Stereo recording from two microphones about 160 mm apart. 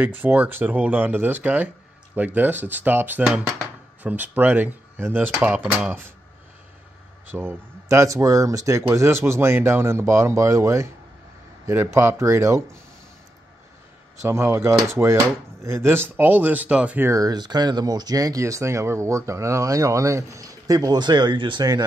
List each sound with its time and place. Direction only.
0.2 s speech: 10° right (ahead or behind)
7.2 s speech: 15° right (ahead or behind)
14.2 s speech: 15° right (ahead or behind)